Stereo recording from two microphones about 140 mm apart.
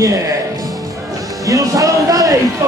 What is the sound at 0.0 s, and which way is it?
Music, 25° right (ahead or behind).